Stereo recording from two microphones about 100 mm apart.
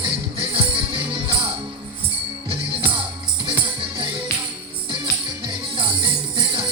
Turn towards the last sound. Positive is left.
turn(degrees=-55)  # may be behind; listen again after turning